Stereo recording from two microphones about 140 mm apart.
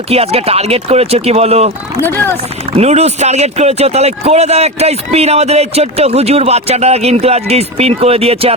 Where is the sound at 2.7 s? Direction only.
50° right (ahead or behind).